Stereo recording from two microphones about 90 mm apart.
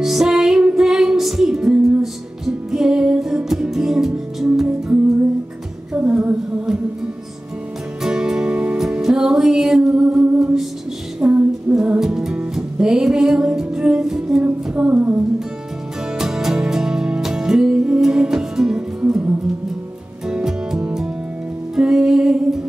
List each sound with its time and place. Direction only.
0.0 s music: 5° right (ahead or behind)
5.9 s humming: 15° right (ahead or behind)
8.0 s music: 5° right (ahead or behind)
14.4 s humming: 15° right (ahead or behind)
16.2 s music: 5° right (ahead or behind)